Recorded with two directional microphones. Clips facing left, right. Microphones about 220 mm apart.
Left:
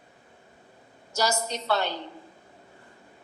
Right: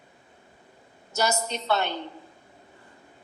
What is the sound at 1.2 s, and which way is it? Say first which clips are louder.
Speech: right 1 dB; 20° right (ahead or behind).